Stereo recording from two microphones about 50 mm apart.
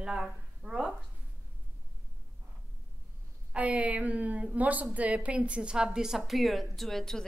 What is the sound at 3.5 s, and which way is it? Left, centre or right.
A woman's voice, right.